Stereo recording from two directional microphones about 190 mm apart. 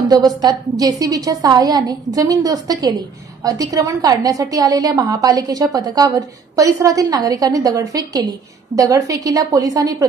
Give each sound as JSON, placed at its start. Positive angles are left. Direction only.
{"t": 0.1, "sound": "a woman's voice", "side_deg": -20}